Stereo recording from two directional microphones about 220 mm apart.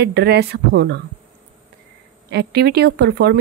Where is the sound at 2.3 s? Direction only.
45° right (ahead or behind).